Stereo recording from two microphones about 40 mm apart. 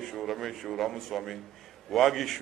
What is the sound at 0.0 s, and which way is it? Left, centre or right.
A man's voice, centre.